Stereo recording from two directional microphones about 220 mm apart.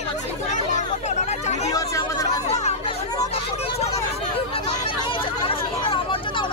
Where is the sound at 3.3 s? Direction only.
30° left (ahead or behind).